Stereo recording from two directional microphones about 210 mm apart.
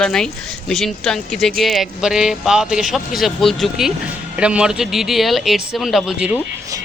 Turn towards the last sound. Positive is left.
turn(degrees=0)  # may be behind; listen again after turning